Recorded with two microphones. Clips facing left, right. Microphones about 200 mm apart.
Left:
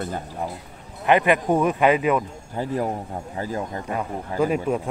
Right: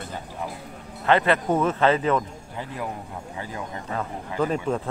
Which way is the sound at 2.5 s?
40° left (ahead or behind).